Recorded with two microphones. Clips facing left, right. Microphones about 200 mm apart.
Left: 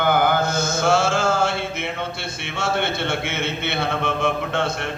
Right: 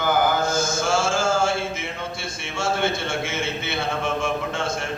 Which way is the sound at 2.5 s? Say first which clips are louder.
Even; 60° left (ahead or behind).